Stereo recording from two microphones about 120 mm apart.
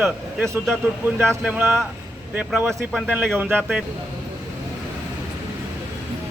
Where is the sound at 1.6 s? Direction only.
Centre (ahead or behind).